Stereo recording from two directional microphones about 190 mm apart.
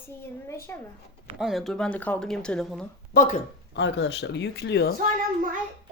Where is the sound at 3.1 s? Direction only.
45° left (ahead or behind).